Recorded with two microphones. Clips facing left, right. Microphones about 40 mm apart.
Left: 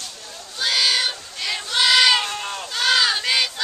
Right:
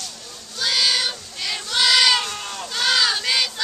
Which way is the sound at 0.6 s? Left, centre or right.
Centre.